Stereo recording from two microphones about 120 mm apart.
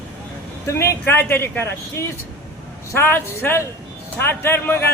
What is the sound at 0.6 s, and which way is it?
A man's voice, 20° left (ahead or behind).